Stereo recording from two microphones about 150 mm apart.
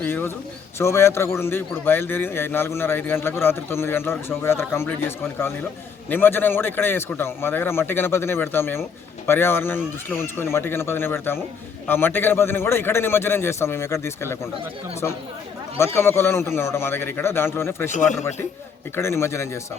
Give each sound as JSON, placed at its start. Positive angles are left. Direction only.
{"t": 0.0, "sound": "a man's voice", "side_deg": 15}
{"t": 17.9, "sound": "speech", "side_deg": 55}
{"t": 18.9, "sound": "a man's voice", "side_deg": 15}